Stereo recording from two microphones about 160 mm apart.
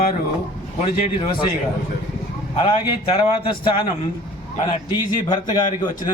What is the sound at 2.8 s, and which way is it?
Speech, 35° left (ahead or behind).